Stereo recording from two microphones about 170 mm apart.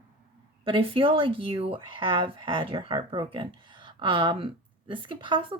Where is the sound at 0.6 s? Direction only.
30° right (ahead or behind).